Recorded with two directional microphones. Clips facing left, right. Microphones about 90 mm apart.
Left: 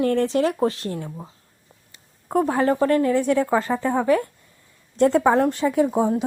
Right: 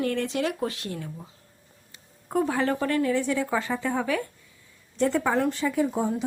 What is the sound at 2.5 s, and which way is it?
Speech, 30° left (ahead or behind).